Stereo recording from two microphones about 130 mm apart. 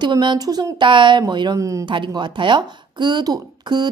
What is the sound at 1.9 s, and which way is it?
Speech, 40° right (ahead or behind).